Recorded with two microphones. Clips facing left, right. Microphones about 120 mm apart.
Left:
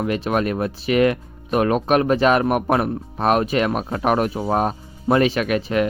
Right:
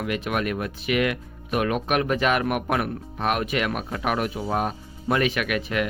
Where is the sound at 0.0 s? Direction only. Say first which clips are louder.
Left 5 dB; 35° left (ahead or behind).